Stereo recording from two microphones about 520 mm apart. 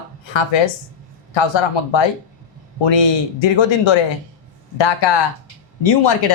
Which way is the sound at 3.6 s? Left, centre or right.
Left.